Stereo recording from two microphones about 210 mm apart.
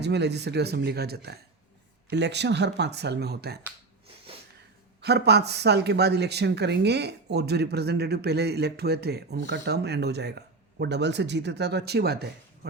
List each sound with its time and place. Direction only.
0.0 s speech: 55° right (ahead or behind)
4.9 s speech: 50° right (ahead or behind)